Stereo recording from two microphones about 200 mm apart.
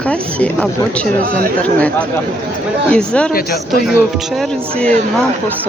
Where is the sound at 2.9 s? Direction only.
5° left (ahead or behind).